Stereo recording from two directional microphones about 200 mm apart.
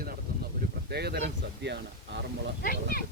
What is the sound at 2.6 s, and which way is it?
Speech, 45° left (ahead or behind).